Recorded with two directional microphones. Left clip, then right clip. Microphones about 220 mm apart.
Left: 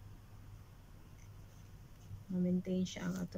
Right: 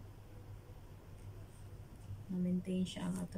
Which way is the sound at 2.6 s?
5° right (ahead or behind).